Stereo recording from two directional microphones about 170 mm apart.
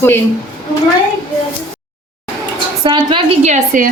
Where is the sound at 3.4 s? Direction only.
45° right (ahead or behind).